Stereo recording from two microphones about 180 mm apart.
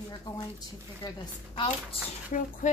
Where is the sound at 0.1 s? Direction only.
25° left (ahead or behind).